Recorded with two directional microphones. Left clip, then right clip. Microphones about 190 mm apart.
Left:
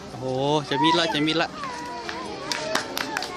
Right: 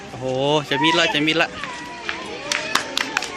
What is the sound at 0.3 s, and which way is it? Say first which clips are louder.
Speech: right 3 dB; centre (ahead or behind).